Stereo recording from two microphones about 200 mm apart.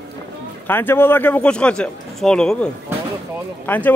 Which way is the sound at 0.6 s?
10° left (ahead or behind).